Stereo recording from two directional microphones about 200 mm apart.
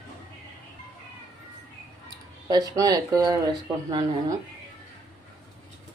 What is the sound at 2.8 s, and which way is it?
Speech, 15° right (ahead or behind).